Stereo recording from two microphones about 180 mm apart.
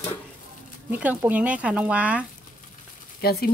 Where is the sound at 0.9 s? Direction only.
10° right (ahead or behind).